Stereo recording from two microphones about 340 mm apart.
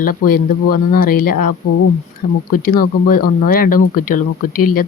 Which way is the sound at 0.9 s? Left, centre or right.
Left.